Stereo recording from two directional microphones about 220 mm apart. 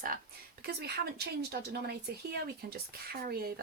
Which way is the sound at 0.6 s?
45° right (ahead or behind).